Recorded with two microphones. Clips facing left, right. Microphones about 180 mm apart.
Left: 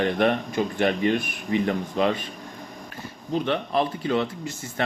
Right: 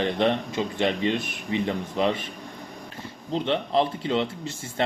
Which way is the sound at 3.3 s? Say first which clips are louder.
Even; 25° right (ahead or behind).